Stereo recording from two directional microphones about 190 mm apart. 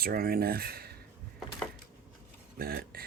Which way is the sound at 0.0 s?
50° right (ahead or behind).